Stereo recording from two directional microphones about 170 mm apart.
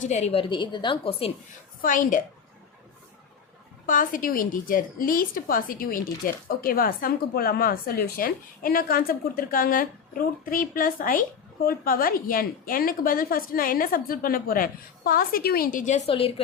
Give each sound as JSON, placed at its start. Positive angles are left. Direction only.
{"t": 0.0, "sound": "a woman's voice", "side_deg": 40}
{"t": 1.8, "sound": "a woman's voice", "side_deg": 50}
{"t": 3.8, "sound": "a woman's voice", "side_deg": 55}
{"t": 16.0, "sound": "a woman's voice", "side_deg": 35}